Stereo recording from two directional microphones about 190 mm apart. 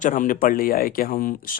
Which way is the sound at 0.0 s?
45° left (ahead or behind).